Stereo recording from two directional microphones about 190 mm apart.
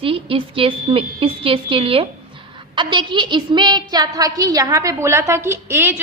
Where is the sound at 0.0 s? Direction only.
30° right (ahead or behind).